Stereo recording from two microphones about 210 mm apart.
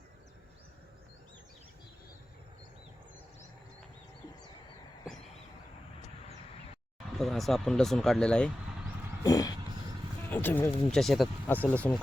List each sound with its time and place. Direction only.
7.1 s speech: centre (ahead or behind)
9.2 s speech: 15° left (ahead or behind)